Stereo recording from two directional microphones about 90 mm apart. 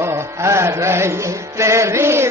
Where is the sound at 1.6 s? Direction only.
35° right (ahead or behind).